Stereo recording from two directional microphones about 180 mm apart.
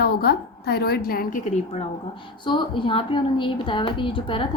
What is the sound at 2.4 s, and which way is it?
Speech, 25° left (ahead or behind).